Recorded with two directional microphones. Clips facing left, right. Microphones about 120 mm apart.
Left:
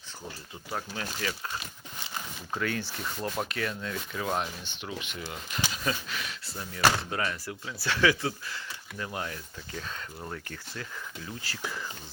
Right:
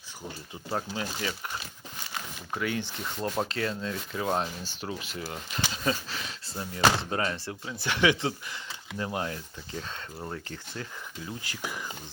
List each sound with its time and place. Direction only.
0.7 s speech: 20° right (ahead or behind)
2.5 s speech: 15° right (ahead or behind)
11.4 s speech: 15° right (ahead or behind)